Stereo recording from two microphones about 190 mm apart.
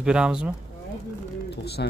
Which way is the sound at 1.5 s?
60° left (ahead or behind).